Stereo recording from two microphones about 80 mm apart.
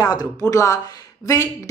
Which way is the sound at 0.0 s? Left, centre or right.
Left.